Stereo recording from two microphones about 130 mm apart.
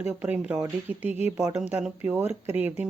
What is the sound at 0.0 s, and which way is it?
Speech, 15° right (ahead or behind).